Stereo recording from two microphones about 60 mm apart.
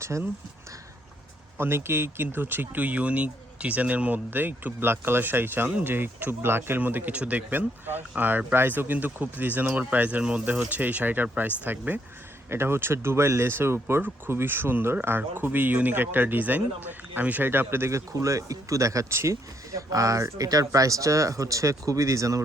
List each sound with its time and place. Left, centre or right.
1.5 s speech: right
12.5 s speech: right
18.1 s speech: right